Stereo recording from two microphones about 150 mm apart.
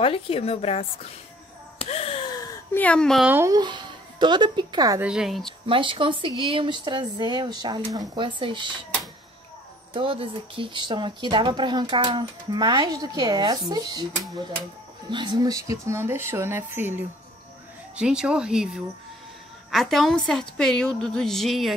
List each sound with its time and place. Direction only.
0.0 s a woman's voice: 40° left (ahead or behind)
1.8 s a sound: 40° left (ahead or behind)
2.7 s speech: 10° left (ahead or behind)
3.3 s speech: 15° right (ahead or behind)
3.5 s a child's voice: 30° right (ahead or behind)
5.0 s a woman's voice: 5° right (ahead or behind)
5.7 s speech: 35° right (ahead or behind)
9.9 s speech: 35° right (ahead or behind)
15.0 s a woman's voice: 30° right (ahead or behind); by 21.7 s centre (ahead or behind)